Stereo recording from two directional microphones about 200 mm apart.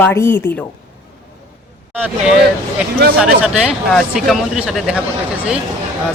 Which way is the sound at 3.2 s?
5° right (ahead or behind).